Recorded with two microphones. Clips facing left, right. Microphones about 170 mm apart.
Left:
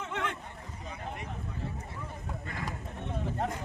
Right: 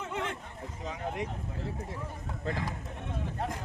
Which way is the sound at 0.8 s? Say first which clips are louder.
Right 6 dB; 90° right.